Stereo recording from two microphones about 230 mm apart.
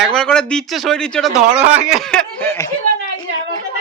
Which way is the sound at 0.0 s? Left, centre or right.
Centre.